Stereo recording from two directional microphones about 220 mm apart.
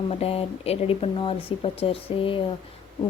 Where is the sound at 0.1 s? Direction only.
25° left (ahead or behind).